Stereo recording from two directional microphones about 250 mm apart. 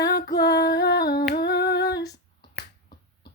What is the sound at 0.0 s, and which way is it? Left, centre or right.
Music, left.